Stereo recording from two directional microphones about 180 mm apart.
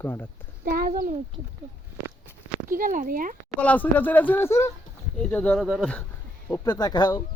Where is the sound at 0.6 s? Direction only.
55° right (ahead or behind).